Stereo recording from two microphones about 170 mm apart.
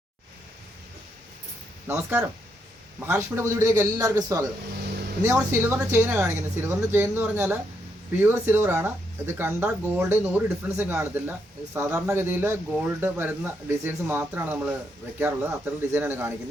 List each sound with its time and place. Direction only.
1.9 s speech: 15° right (ahead or behind)